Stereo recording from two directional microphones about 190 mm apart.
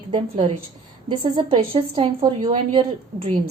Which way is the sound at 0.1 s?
30° right (ahead or behind).